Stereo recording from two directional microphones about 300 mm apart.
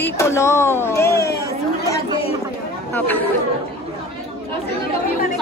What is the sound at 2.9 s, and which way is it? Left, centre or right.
Speech, centre.